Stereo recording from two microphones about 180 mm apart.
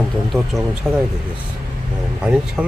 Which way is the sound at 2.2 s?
5° right (ahead or behind).